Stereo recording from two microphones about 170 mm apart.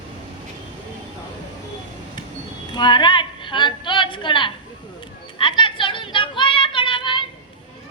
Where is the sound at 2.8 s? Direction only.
25° left (ahead or behind).